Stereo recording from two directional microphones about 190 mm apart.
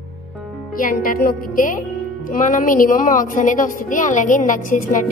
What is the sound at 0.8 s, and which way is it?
A woman's voice, 45° left (ahead or behind).